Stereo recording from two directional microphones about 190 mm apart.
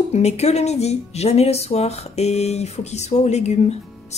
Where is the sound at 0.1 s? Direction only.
35° left (ahead or behind).